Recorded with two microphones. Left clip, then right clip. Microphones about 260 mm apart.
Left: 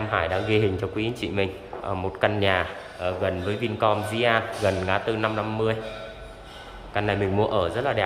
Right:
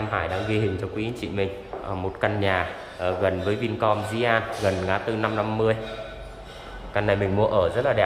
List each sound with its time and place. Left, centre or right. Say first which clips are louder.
0.1 s speech: left 4 dB; centre
6.9 s speech: right 2 dB; centre